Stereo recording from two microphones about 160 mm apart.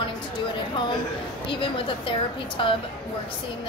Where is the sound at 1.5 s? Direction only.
35° left (ahead or behind).